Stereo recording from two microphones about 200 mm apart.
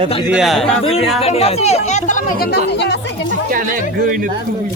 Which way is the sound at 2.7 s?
60° left (ahead or behind).